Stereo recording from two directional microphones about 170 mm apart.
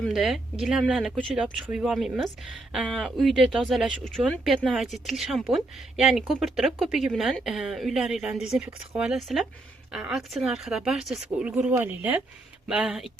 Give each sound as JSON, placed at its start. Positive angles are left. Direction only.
{"t": 0.0, "sound": "speech", "side_deg": 0}